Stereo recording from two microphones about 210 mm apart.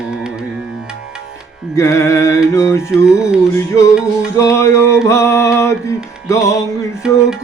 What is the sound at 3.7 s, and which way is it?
Music, 15° left (ahead or behind).